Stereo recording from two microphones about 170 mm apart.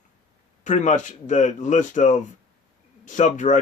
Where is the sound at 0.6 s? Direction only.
45° left (ahead or behind).